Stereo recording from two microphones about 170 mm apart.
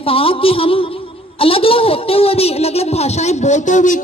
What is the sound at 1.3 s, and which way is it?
Speech, 35° left (ahead or behind).